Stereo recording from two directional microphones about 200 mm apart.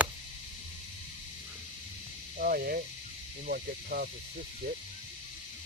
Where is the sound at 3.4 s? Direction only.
50° right (ahead or behind).